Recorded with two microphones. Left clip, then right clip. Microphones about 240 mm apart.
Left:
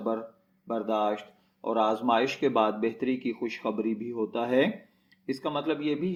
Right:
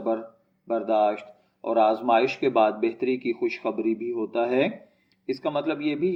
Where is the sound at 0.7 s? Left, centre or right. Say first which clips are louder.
Right 5 dB; left.